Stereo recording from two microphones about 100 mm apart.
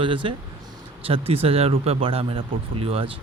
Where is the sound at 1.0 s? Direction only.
70° right (ahead or behind).